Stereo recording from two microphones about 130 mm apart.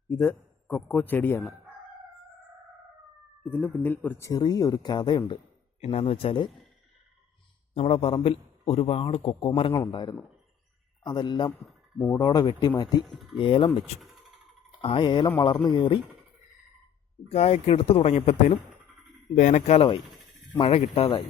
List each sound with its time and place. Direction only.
0.1 s speech: 15° left (ahead or behind)
3.4 s speech: 10° left (ahead or behind)
4.3 s speech: 30° left (ahead or behind)
5.8 s a man's voice: 55° left (ahead or behind)
7.7 s a man's voice: 55° left (ahead or behind); by 13.7 s 40° left (ahead or behind)
14.0 s typing: centre (ahead or behind)
14.8 s speech: 40° left (ahead or behind)
17.2 s a man's voice: 55° left (ahead or behind)
19.4 s a man's voice: 70° left (ahead or behind); by 21.1 s 50° left (ahead or behind)